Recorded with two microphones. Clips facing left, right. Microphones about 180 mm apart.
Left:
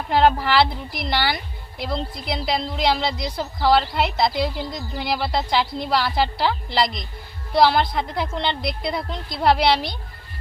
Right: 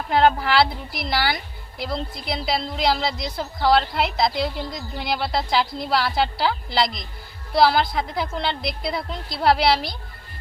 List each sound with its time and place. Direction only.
0.1 s a woman's voice: centre (ahead or behind)